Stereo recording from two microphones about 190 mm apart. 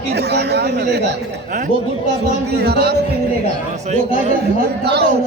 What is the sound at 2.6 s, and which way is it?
Speech, 60° right (ahead or behind).